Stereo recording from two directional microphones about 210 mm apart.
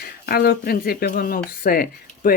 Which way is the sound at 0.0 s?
45° left (ahead or behind).